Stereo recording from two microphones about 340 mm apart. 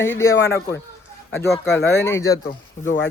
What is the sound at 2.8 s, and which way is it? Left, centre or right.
Speech, left.